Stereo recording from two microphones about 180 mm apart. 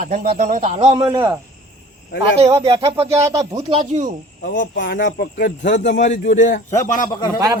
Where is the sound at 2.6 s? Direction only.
30° right (ahead or behind).